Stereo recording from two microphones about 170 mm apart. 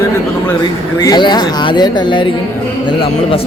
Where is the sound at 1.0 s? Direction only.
25° left (ahead or behind).